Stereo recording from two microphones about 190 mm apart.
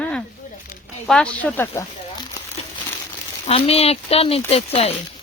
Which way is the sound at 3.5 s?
30° left (ahead or behind).